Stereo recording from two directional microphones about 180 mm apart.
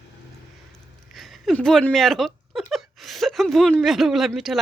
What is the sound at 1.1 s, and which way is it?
Speech, centre (ahead or behind).